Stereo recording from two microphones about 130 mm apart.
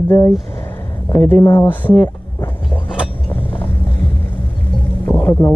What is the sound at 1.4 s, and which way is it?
Speech, 35° left (ahead or behind).